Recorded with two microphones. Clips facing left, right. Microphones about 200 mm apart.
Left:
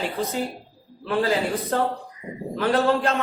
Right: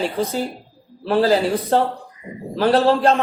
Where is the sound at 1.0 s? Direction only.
35° right (ahead or behind).